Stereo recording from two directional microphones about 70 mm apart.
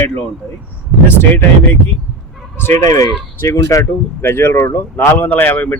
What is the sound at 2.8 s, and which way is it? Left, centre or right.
Speech, left.